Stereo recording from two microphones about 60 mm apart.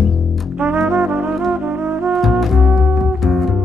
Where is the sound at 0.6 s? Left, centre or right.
Right.